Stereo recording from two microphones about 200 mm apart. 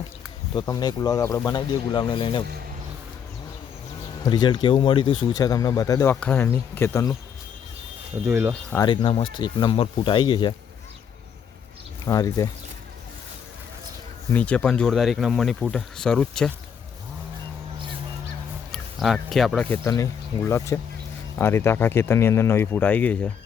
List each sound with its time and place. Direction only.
0.5 s speech: 20° left (ahead or behind)
4.2 s speech: 20° left (ahead or behind)
8.3 s speech: 10° right (ahead or behind)
8.7 s speech: 20° left (ahead or behind)
12.0 s speech: 15° left (ahead or behind)
14.3 s speech: 5° left (ahead or behind)
18.7 s speech: centre (ahead or behind)